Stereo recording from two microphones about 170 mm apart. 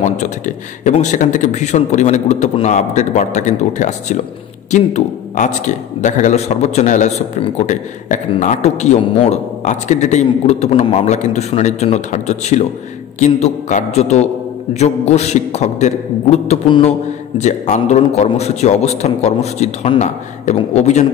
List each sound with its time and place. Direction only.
0.8 s a man's voice: 45° left (ahead or behind)